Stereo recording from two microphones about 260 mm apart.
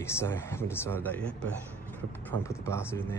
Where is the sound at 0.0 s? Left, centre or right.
Centre.